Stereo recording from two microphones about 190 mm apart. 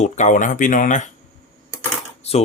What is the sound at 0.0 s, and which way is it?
Speech, 40° left (ahead or behind).